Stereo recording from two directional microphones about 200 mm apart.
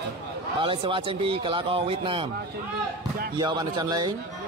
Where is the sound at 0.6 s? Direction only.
25° right (ahead or behind).